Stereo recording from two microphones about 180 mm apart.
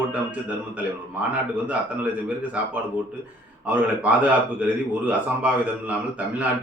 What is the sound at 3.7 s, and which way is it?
Speech, 10° right (ahead or behind).